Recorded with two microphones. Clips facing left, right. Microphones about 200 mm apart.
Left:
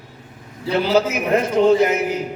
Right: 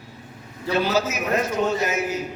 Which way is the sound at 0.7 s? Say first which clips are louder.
Left 4 dB; 60° left (ahead or behind).